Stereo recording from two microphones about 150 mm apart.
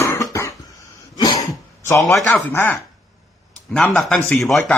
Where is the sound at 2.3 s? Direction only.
15° left (ahead or behind).